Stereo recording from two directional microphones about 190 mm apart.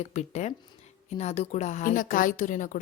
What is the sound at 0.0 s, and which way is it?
A woman's voice, 35° left (ahead or behind).